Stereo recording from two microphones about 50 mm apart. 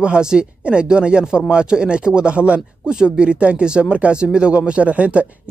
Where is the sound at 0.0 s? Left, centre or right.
Centre.